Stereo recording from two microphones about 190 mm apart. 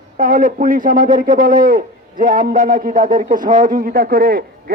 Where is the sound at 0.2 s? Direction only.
45° right (ahead or behind).